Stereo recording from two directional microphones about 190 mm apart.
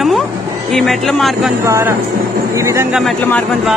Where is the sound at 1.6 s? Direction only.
15° right (ahead or behind).